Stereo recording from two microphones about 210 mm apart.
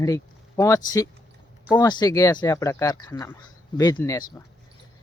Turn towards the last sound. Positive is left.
turn(degrees=15)  # may be behind; listen again after turning